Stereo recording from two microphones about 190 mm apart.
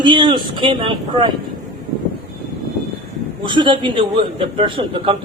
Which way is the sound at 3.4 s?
25° right (ahead or behind).